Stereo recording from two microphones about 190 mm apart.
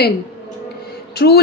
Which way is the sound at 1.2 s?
60° left (ahead or behind).